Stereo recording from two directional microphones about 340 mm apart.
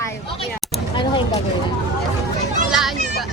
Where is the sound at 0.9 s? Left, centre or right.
Centre.